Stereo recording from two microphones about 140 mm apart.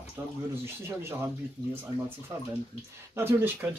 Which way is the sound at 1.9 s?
35° left (ahead or behind).